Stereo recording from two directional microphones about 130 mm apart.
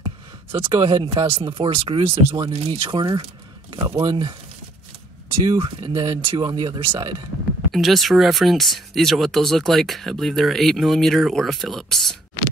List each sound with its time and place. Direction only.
0.5 s speech: 40° right (ahead or behind)
2.5 s speech: 50° right (ahead or behind); by 4.4 s 35° right (ahead or behind)
5.4 s speech: 40° right (ahead or behind)
7.7 s speech: centre (ahead or behind)